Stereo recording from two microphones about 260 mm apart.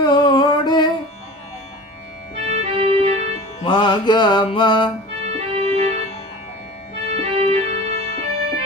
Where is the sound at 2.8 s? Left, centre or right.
Right.